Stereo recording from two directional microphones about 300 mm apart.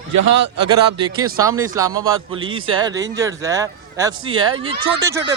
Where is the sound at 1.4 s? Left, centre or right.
Centre.